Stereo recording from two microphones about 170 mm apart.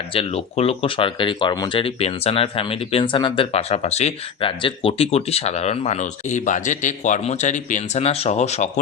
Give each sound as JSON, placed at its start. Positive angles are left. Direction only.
{"t": 0.1, "sound": "speech", "side_deg": 35}